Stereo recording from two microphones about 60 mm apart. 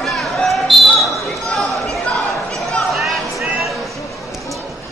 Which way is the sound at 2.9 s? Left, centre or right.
Centre.